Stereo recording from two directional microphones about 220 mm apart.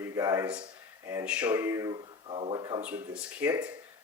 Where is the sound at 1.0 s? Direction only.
10° right (ahead or behind).